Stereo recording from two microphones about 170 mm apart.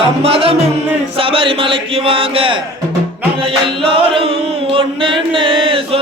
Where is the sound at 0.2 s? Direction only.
35° right (ahead or behind).